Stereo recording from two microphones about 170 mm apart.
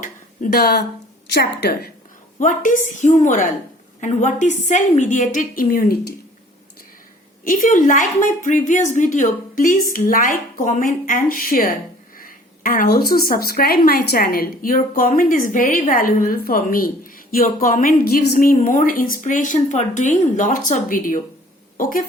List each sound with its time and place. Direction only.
0.0 s a sound: 55° left (ahead or behind)
1.3 s a woman's voice: 70° left (ahead or behind)
2.4 s a woman's voice: 50° left (ahead or behind); by 6.1 s 65° left (ahead or behind)
7.4 s a woman's voice: 55° left (ahead or behind)